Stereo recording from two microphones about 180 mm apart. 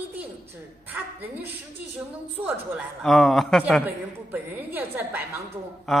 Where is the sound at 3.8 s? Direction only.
10° right (ahead or behind).